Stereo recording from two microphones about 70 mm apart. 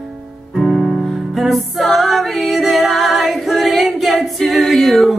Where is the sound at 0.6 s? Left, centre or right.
Centre.